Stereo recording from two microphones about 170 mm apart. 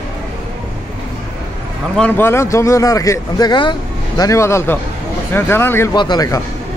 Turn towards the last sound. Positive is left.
turn(degrees=25)  # may be behind; listen again after turning